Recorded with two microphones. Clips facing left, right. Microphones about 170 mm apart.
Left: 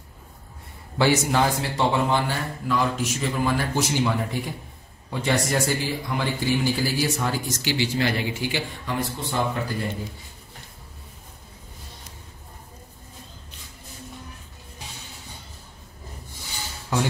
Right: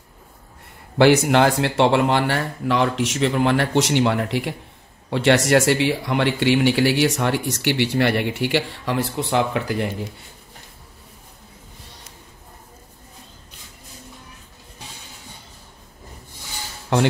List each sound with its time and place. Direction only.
0.9 s speech: 60° right (ahead or behind); by 9.8 s 80° right